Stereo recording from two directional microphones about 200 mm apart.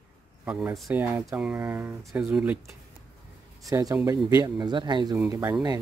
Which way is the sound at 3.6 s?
15° right (ahead or behind).